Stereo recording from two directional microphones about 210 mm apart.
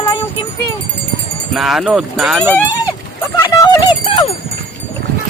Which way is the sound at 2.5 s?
15° left (ahead or behind).